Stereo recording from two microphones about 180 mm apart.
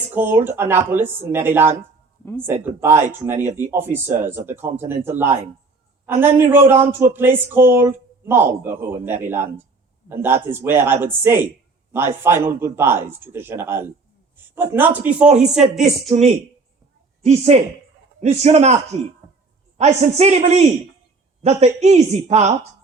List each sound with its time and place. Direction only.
0.1 s speech: 10° right (ahead or behind)
17.2 s speech: 35° right (ahead or behind)